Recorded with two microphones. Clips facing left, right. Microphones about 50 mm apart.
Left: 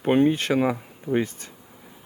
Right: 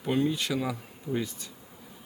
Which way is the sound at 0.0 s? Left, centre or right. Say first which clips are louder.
Left 8 dB; left.